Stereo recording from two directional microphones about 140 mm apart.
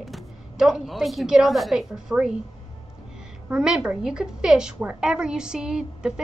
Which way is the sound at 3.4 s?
5° right (ahead or behind).